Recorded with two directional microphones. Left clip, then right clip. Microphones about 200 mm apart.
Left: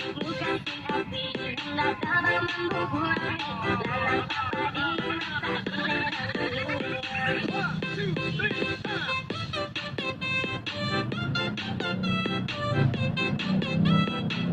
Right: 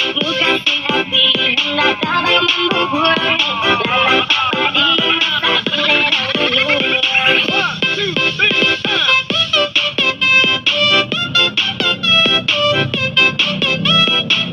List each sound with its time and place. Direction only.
0.9 s music: 25° right (ahead or behind)